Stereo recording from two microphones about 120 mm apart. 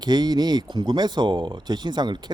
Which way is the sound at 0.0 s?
35° right (ahead or behind).